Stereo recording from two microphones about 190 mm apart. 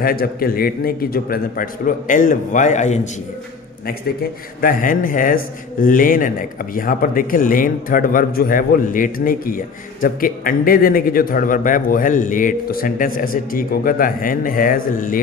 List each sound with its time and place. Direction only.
0.0 s a man's voice: 50° left (ahead or behind)
4.6 s a man's voice: 45° left (ahead or behind)